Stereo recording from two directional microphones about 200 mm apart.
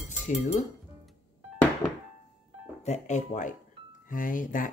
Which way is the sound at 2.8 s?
35° left (ahead or behind).